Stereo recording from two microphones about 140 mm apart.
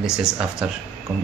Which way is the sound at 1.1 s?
25° right (ahead or behind).